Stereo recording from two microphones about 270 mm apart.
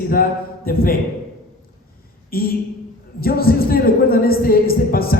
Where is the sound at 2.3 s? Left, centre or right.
Left.